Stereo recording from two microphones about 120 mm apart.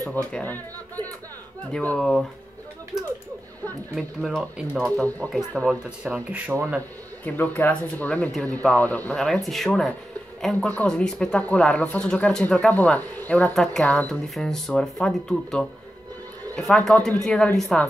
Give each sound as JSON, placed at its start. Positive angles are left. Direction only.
{"t": 0.1, "sound": "speech", "side_deg": 10}
{"t": 3.9, "sound": "speech", "side_deg": 0}
{"t": 4.8, "sound": "speech", "side_deg": 10}
{"t": 5.9, "sound": "speech", "side_deg": -10}
{"t": 7.2, "sound": "speech", "side_deg": 15}